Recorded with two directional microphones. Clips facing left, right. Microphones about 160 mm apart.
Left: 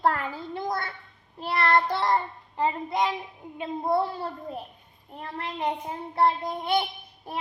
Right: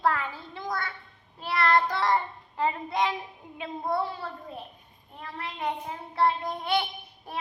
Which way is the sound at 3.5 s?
35° left (ahead or behind).